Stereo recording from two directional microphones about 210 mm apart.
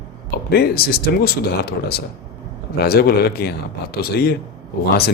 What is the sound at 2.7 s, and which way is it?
Speech, 50° left (ahead or behind).